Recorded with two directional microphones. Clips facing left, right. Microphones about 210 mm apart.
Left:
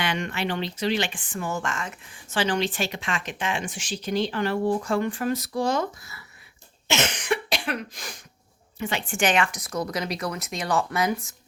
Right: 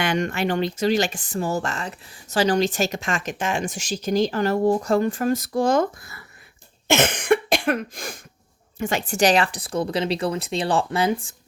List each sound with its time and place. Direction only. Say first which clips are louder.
0.0 s speech: right 5 dB; 45° right (ahead or behind)
6.8 s cough: right 6 dB; 55° right (ahead or behind)
8.8 s speech: right 5 dB; 45° right (ahead or behind)